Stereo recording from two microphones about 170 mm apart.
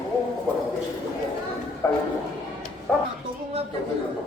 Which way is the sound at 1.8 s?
15° left (ahead or behind).